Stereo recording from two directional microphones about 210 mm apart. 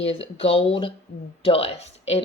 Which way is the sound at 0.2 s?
25° left (ahead or behind).